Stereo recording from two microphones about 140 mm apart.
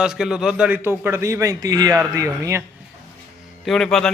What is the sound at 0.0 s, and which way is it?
A man's voice, 5° right (ahead or behind).